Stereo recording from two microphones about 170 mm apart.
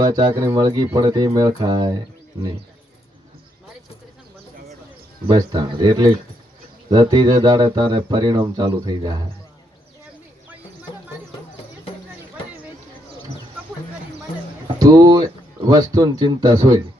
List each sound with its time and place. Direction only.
0.3 s speech: 20° right (ahead or behind)
5.3 s speech: 25° right (ahead or behind)
14.8 s speech: 20° right (ahead or behind)